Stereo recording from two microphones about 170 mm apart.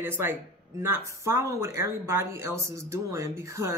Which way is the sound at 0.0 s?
10° right (ahead or behind).